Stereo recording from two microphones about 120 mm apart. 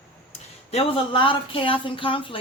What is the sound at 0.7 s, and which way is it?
Speech, 50° left (ahead or behind).